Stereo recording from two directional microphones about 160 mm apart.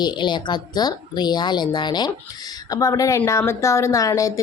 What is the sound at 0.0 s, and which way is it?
A woman's voice, 25° left (ahead or behind).